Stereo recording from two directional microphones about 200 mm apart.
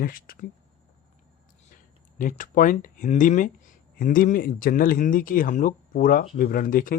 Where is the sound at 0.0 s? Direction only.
45° left (ahead or behind).